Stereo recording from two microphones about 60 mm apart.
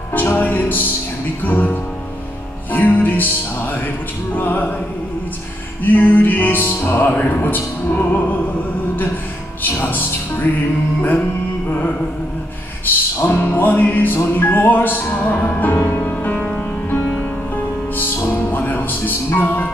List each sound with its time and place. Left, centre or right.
0.4 s music: left
5.9 s music: left
7.1 s music: left
9.6 s music: left
12.8 s music: left